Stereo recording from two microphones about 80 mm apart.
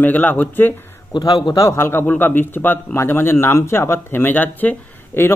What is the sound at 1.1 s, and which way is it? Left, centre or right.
Speech, left.